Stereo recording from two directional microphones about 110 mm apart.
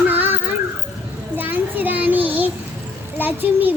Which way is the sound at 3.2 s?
15° right (ahead or behind).